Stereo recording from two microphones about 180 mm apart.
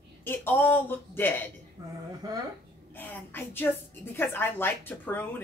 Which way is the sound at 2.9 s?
10° left (ahead or behind).